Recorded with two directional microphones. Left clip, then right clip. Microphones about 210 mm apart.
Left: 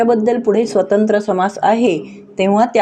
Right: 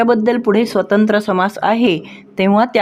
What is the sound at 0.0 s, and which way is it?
Speech, 35° right (ahead or behind).